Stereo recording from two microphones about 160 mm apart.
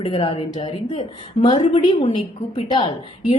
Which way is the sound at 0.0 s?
35° left (ahead or behind).